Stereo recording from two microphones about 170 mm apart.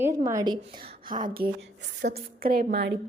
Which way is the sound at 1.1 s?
55° right (ahead or behind).